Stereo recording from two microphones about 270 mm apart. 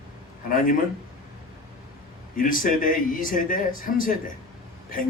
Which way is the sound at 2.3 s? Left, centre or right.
Left.